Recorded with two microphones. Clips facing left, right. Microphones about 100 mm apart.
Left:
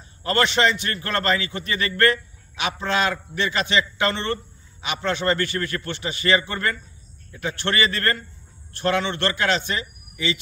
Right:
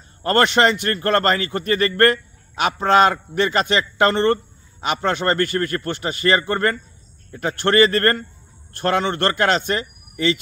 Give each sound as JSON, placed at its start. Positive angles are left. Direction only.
{"t": 0.2, "sound": "a man's voice", "side_deg": -50}